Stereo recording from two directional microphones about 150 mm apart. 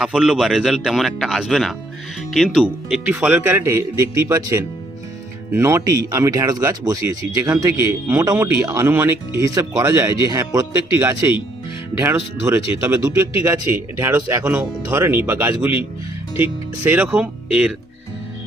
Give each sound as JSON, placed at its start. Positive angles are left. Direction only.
{"t": 0.0, "sound": "speech", "side_deg": -5}